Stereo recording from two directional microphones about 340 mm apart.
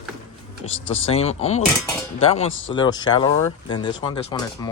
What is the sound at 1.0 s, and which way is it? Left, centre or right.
Speech, centre.